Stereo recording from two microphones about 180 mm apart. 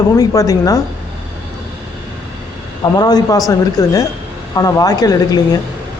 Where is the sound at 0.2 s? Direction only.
20° left (ahead or behind).